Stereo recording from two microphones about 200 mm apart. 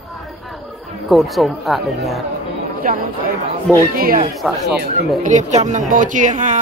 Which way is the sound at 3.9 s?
45° right (ahead or behind).